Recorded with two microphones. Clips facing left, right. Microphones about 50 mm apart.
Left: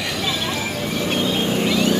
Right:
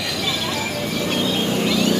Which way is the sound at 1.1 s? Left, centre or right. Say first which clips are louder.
Left 1 dB; left.